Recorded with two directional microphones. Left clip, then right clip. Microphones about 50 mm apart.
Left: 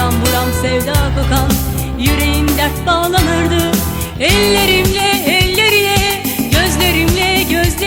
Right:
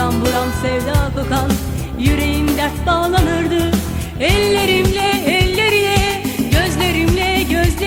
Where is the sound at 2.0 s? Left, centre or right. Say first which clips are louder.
Left 2 dB; left.